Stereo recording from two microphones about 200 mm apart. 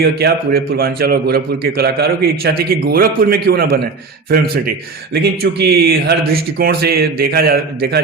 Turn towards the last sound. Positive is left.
turn(degrees=-50)  # may be behind; listen again after turning